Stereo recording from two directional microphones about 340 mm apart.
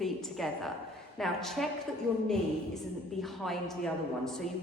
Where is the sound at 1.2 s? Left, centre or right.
Centre.